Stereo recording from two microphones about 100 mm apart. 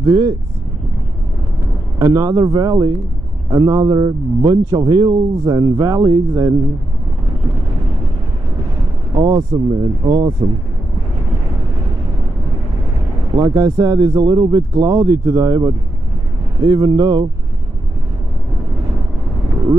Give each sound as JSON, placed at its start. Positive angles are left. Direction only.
{"t": 0.0, "sound": "a man's voice", "side_deg": -35}
{"t": 2.0, "sound": "a man's voice", "side_deg": -35}
{"t": 9.1, "sound": "a man's voice", "side_deg": -35}
{"t": 13.4, "sound": "a man's voice", "side_deg": -35}